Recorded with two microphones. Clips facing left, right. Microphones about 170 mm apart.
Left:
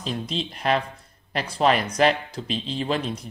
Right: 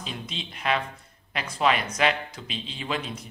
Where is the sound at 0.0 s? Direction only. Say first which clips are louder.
Left 8 dB; 35° left (ahead or behind).